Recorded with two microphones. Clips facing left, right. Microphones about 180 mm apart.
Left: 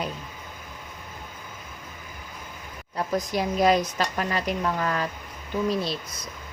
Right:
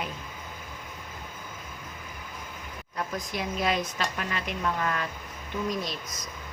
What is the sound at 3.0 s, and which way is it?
Speech, 40° left (ahead or behind).